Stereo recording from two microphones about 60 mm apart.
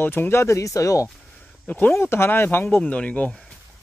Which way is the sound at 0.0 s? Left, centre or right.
Left.